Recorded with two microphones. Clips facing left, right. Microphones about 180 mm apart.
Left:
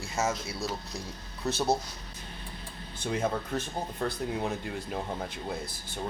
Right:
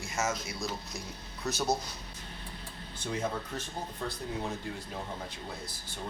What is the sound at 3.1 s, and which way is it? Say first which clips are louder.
Speech: left 4 dB; 55° left (ahead or behind).